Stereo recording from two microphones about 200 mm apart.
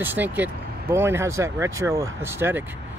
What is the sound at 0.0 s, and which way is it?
Speech, 10° right (ahead or behind).